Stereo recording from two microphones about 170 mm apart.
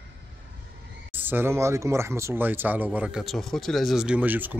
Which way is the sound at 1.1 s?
10° right (ahead or behind).